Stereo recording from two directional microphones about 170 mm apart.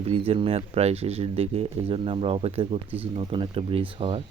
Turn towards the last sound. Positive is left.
turn(degrees=-30)  # may be behind; listen again after turning